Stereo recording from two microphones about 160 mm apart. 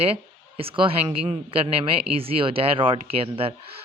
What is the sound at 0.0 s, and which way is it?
Speech, 35° right (ahead or behind).